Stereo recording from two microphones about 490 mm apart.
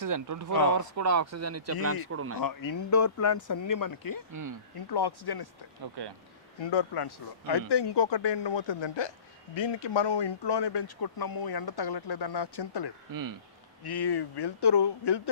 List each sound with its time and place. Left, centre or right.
0.0 s speech: right
2.4 s speech: left
4.3 s speech: right
4.8 s speech: left
5.8 s speech: right
6.6 s speech: left
13.1 s speech: right
13.8 s speech: left